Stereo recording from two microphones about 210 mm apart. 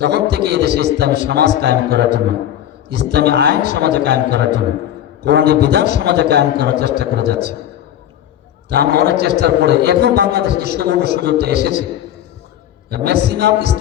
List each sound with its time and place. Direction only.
0.0 s a man's voice: 50° right (ahead or behind)
8.7 s a man's voice: 50° right (ahead or behind)
12.9 s a man's voice: 50° right (ahead or behind)